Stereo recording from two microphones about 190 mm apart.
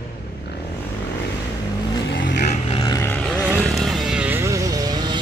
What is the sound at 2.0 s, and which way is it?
Vehicle, 70° left (ahead or behind).